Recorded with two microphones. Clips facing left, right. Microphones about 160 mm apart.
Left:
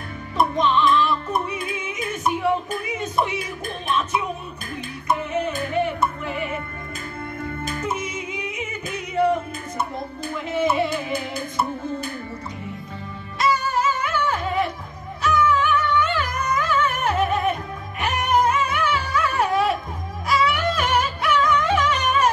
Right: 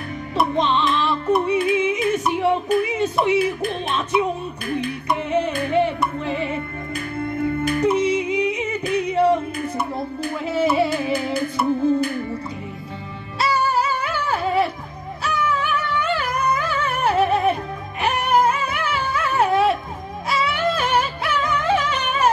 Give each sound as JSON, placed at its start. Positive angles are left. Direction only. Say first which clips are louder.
{"t": 0.6, "sound": "music", "louder": "left 3 dB", "side_deg": -30}
{"t": 1.4, "sound": "yodeling", "louder": "right 10 dB", "side_deg": -25}
{"t": 2.4, "sound": "speech", "louder": "right 5 dB", "side_deg": -30}
{"t": 5.3, "sound": "singing", "louder": "right 4 dB", "side_deg": -30}
{"t": 6.2, "sound": "music", "louder": "right 4 dB", "side_deg": -30}
{"t": 7.8, "sound": "music", "louder": "right 12 dB", "side_deg": -30}
{"t": 10.4, "sound": "music", "louder": "right 2 dB", "side_deg": -30}
{"t": 13.4, "sound": "music", "louder": "right 1 dB", "side_deg": -30}
{"t": 19.1, "sound": "a sound", "louder": "right 3 dB", "side_deg": -25}
{"t": 20.2, "sound": "music", "louder": "even", "side_deg": -30}